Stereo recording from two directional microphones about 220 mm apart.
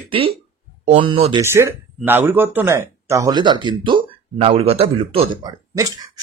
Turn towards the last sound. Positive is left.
turn(degrees=-15)  # may be behind; listen again after turning